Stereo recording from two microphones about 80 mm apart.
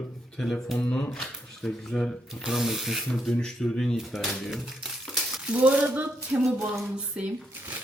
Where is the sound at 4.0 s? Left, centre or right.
Centre.